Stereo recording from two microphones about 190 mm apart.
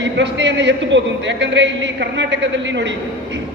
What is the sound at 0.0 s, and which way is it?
A man's voice, 70° right (ahead or behind).